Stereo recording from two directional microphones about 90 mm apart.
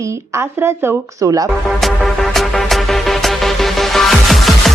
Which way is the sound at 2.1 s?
Centre (ahead or behind).